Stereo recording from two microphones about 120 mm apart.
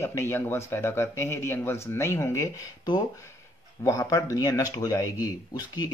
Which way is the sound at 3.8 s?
30° left (ahead or behind).